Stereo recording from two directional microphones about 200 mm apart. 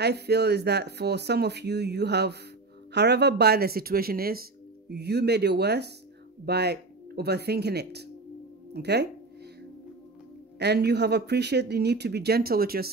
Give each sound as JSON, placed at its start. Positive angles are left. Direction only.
{"t": 0.0, "sound": "speech", "side_deg": -55}
{"t": 10.6, "sound": "speech", "side_deg": -55}